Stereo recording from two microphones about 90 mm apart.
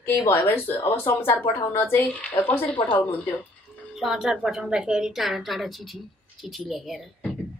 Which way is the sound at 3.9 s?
5° right (ahead or behind).